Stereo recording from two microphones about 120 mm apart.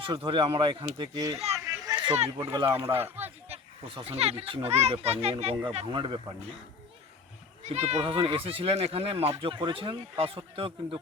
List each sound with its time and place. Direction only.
0.0 s speech: 45° right (ahead or behind)
1.1 s speech: 30° right (ahead or behind)
1.5 s a sound: 25° right (ahead or behind)
2.1 s a child's voice: 60° right (ahead or behind)
2.8 s speech: 20° right (ahead or behind)
3.5 s a child's voice: 60° right (ahead or behind)
5.9 s speech: 45° right (ahead or behind)
7.6 s speech: 65° right (ahead or behind)